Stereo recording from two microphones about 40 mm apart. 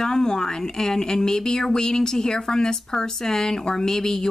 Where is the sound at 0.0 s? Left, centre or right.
Centre.